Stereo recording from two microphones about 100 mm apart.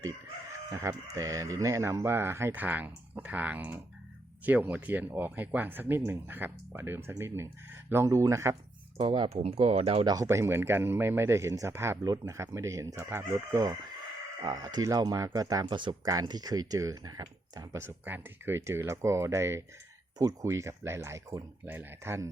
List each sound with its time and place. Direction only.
0.7 s speech: 30° right (ahead or behind)
9.0 s speech: 55° right (ahead or behind); by 10.1 s 80° right
10.2 s speech: 25° right (ahead or behind)
14.4 s speech: 40° right (ahead or behind)
15.7 s speech: 50° right (ahead or behind)
16.0 s speech: 40° right (ahead or behind)
17.7 s speech: 25° right (ahead or behind)
21.7 s speech: 20° right (ahead or behind)